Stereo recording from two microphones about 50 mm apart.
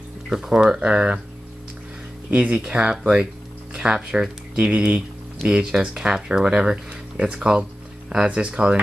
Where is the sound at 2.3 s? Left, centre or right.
Right.